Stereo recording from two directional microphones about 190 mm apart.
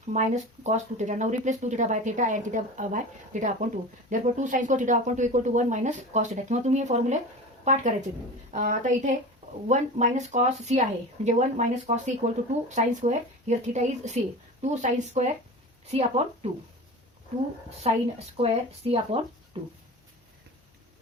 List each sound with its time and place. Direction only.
0.1 s speech: 40° right (ahead or behind)
17.8 s speech: 35° right (ahead or behind)